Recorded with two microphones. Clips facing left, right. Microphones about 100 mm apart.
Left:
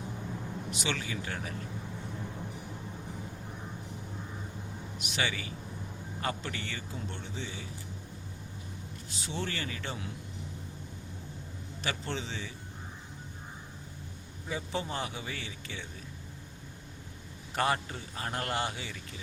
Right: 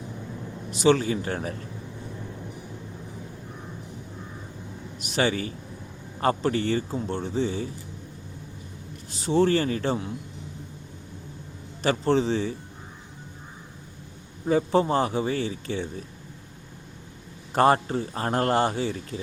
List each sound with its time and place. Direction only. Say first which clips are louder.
0.7 s a man's voice: right 16 dB; 35° right (ahead or behind)
5.0 s a man's voice: right 10 dB; 40° right (ahead or behind)
9.1 s a man's voice: right 16 dB; 40° right (ahead or behind)
11.8 s a man's voice: right 14 dB; 40° right (ahead or behind)
14.4 s a man's voice: right 14 dB; 45° right (ahead or behind)
17.5 s a man's voice: right 10 dB; 40° right (ahead or behind)